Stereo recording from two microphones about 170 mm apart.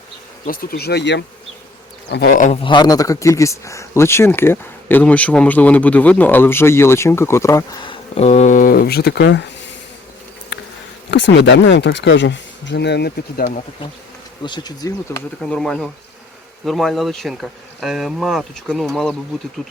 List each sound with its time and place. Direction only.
0.4 s speech: 60° left (ahead or behind); by 2.3 s 75° left (ahead or behind)
2.3 s speech: 50° left (ahead or behind)
2.6 s speech: 30° left (ahead or behind); by 9.5 s 85° left
10.5 s insect: 90° left
11.1 s speech: 90° left; by 13.5 s 65° left (ahead or behind)
14.4 s speech: 25° left (ahead or behind)
15.4 s speech: 5° left (ahead or behind)